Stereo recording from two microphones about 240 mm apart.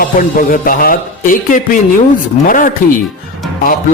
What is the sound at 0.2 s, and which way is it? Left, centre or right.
Speech, left.